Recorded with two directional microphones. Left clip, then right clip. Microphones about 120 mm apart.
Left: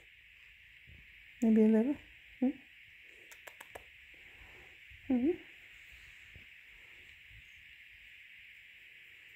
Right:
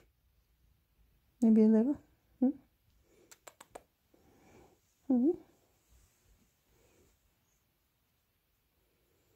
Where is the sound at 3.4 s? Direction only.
15° right (ahead or behind).